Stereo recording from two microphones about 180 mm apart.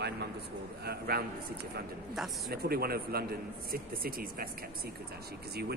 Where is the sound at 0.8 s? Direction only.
60° right (ahead or behind).